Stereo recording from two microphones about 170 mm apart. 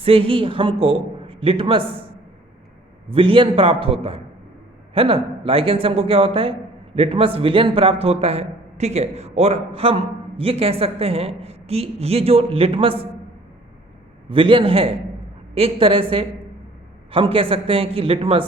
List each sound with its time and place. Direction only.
0.0 s a man's voice: 35° right (ahead or behind)
3.1 s a man's voice: 30° right (ahead or behind)
14.3 s a man's voice: 30° right (ahead or behind)